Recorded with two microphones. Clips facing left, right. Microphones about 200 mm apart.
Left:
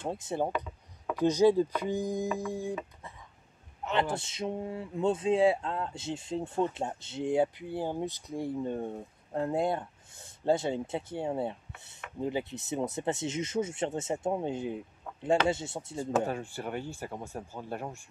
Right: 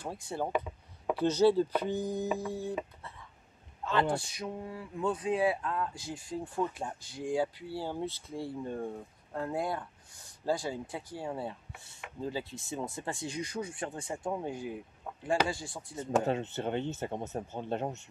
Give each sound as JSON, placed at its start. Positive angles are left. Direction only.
{"t": 0.0, "sound": "speech", "side_deg": 20}
{"t": 1.2, "sound": "chopping", "side_deg": 15}
{"t": 3.8, "sound": "speech", "side_deg": 20}
{"t": 16.0, "sound": "speech", "side_deg": -25}